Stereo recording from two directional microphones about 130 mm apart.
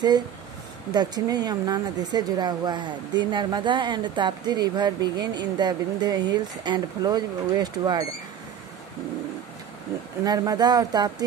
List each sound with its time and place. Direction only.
0.9 s a woman's voice: 30° right (ahead or behind)
10.2 s speech: 30° right (ahead or behind)